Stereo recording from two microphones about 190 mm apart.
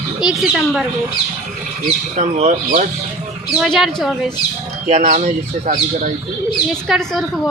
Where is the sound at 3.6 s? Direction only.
Centre (ahead or behind).